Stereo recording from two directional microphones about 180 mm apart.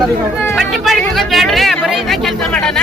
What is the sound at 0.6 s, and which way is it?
Chatter, centre (ahead or behind).